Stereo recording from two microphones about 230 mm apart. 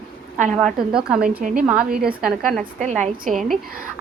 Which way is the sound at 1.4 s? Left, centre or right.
Right.